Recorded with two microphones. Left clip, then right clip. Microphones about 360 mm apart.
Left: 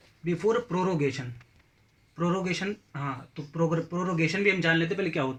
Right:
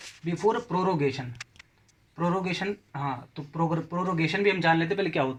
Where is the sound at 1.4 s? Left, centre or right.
Right.